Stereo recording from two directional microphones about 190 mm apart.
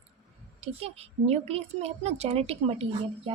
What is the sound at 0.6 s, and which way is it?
A woman's voice, 35° right (ahead or behind).